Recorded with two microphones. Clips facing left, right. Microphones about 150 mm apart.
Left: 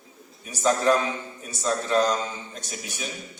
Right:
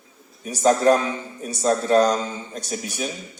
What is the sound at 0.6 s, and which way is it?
A man's voice, 45° right (ahead or behind).